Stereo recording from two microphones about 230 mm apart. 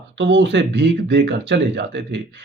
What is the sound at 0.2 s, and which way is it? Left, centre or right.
Speech, right.